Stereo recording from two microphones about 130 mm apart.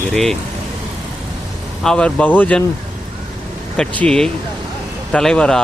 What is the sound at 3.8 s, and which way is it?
Speech, 5° left (ahead or behind).